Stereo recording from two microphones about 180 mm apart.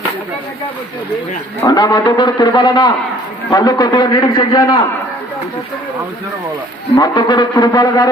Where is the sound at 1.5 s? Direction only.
20° left (ahead or behind).